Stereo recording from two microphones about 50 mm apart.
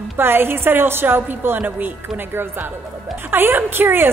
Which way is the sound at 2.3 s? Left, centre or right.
Right.